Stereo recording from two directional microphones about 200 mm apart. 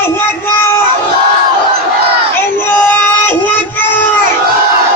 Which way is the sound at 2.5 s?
10° left (ahead or behind).